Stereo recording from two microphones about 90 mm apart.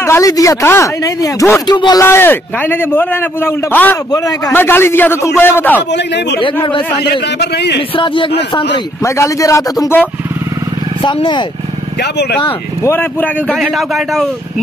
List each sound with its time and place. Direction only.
0.0 s a sound: 30° left (ahead or behind)
0.3 s speech: 35° left (ahead or behind)
1.7 s speech: 50° left (ahead or behind)
2.0 s a man's voice: 25° left (ahead or behind)
4.1 s speech: 40° left (ahead or behind)
4.6 s a man's voice: 25° left (ahead or behind)
7.9 s speech: 70° left (ahead or behind)
9.0 s speech: 35° left (ahead or behind)
11.0 s speech: 65° left (ahead or behind)
12.8 s a man's voice: 25° left (ahead or behind)
13.6 s a man's voice: centre (ahead or behind)